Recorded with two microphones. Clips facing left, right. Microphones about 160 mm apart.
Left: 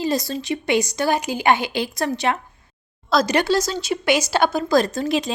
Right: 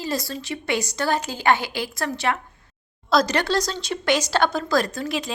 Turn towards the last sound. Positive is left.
turn(degrees=20)  # may be behind; listen again after turning